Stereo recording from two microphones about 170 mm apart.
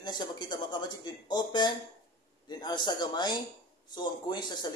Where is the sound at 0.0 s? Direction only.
25° left (ahead or behind).